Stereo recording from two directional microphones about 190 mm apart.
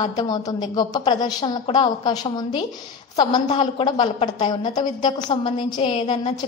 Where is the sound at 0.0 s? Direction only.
20° left (ahead or behind).